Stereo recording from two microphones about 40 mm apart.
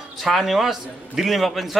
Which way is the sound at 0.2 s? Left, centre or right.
Centre.